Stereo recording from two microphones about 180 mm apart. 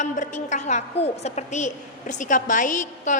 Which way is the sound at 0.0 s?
45° left (ahead or behind).